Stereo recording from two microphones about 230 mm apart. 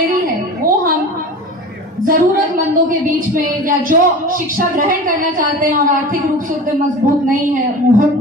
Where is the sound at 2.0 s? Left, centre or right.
Right.